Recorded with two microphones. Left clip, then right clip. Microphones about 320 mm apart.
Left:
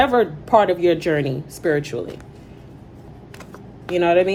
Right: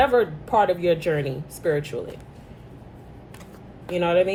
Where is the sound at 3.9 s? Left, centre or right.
Left.